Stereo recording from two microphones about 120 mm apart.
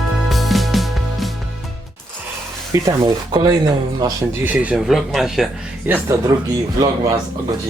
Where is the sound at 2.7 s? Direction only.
30° right (ahead or behind).